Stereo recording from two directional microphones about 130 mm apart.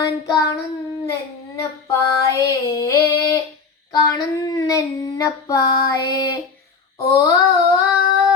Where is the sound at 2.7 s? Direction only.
25° left (ahead or behind).